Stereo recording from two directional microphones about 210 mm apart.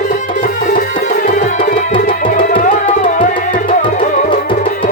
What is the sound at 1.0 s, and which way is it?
Tabla, 40° left (ahead or behind).